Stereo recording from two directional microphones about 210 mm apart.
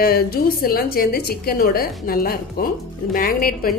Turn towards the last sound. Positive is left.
turn(degrees=45)  # may be behind; listen again after turning